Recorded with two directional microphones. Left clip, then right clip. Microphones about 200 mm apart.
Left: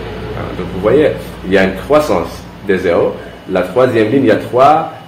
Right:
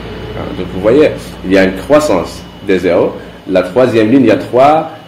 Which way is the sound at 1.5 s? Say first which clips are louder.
Right 2 dB; 50° right (ahead or behind).